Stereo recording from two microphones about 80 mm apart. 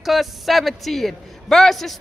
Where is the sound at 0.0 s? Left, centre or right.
Centre.